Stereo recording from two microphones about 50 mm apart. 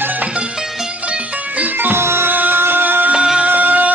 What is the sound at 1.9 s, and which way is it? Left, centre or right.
Music, right.